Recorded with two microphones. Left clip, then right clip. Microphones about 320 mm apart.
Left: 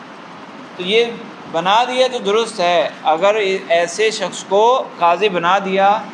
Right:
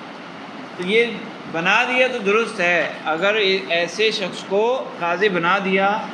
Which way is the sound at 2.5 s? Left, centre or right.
Centre.